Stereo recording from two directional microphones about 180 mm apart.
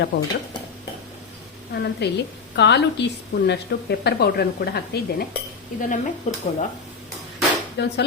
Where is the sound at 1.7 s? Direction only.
65° left (ahead or behind).